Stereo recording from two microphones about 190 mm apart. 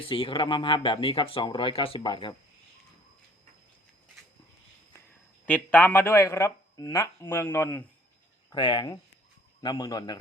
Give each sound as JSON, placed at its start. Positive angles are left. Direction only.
{"t": 0.0, "sound": "speech", "side_deg": 25}
{"t": 5.5, "sound": "speech", "side_deg": 10}
{"t": 8.4, "sound": "speech", "side_deg": 25}